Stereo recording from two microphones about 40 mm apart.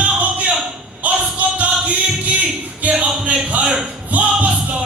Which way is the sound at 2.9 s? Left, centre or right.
Right.